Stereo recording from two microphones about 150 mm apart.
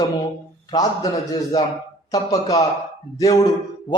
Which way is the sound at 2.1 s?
25° left (ahead or behind).